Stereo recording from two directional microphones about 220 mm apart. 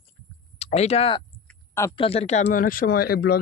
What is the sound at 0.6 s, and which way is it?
Speech, 30° left (ahead or behind).